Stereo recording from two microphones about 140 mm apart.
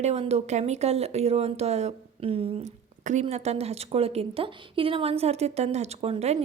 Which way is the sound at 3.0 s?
55° right (ahead or behind).